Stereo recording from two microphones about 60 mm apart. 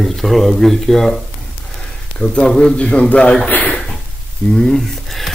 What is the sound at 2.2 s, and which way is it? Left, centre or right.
A man's voice, centre.